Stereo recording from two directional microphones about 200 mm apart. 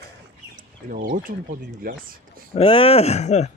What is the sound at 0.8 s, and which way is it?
Speech, 45° right (ahead or behind).